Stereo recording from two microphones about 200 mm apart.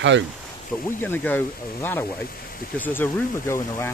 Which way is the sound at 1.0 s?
10° left (ahead or behind).